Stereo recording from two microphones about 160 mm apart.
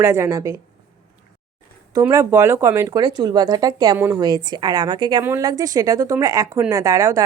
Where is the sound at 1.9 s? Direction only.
20° right (ahead or behind).